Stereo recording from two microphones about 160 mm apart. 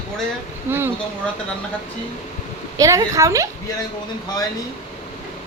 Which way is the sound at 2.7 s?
20° right (ahead or behind).